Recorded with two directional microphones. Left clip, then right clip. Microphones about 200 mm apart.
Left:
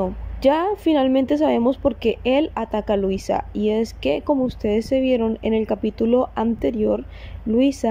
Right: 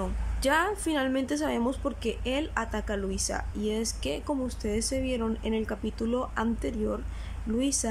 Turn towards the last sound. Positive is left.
turn(degrees=20)  # may be behind; listen again after turning